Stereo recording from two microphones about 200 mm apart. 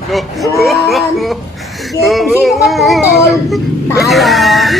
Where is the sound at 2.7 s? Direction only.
Centre (ahead or behind).